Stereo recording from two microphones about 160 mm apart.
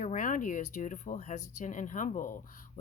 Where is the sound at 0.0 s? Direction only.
55° left (ahead or behind).